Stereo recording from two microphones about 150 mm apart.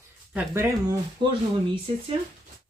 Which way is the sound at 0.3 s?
15° right (ahead or behind).